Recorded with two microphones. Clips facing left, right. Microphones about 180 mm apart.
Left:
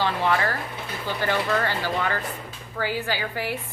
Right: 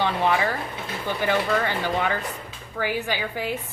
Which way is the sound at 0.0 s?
15° right (ahead or behind).